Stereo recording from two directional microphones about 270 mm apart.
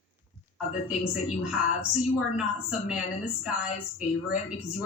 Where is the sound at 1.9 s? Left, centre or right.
Centre.